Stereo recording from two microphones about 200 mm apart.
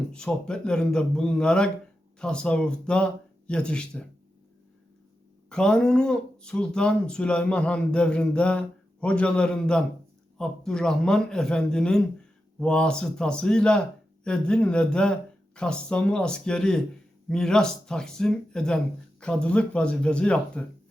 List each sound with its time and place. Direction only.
0.1 s speech: 5° left (ahead or behind)
5.5 s speech: 5° left (ahead or behind)